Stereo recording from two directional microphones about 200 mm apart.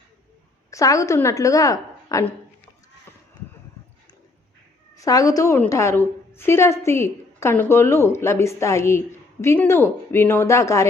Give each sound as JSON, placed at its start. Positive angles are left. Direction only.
{"t": 0.7, "sound": "a woman's voice", "side_deg": 15}
{"t": 4.9, "sound": "a woman's voice", "side_deg": 15}